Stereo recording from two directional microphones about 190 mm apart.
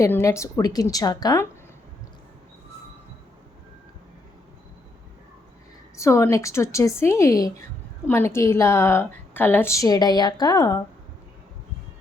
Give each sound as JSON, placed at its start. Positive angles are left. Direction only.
{"t": 0.0, "sound": "a woman's voice", "side_deg": 15}
{"t": 6.0, "sound": "a woman's voice", "side_deg": 15}